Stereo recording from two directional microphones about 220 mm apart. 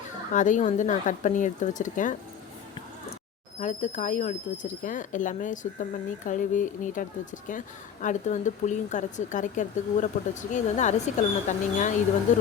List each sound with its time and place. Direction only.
0.3 s speech: 35° left (ahead or behind)
3.6 s speech: 35° left (ahead or behind)